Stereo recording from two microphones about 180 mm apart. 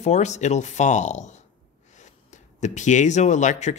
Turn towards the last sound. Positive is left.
turn(degrees=40)  # may be behind; listen again after turning